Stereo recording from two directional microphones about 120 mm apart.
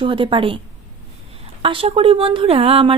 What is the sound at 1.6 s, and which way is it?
A woman's voice, 50° right (ahead or behind).